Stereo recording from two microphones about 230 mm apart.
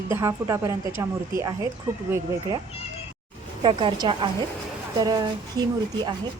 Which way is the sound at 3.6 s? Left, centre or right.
Right.